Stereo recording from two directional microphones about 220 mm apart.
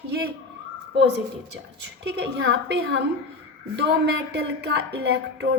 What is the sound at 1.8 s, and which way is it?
A woman's voice, 50° right (ahead or behind).